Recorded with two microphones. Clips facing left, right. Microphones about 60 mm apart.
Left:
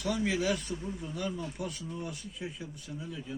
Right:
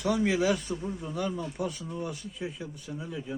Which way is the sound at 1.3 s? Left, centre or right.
Centre.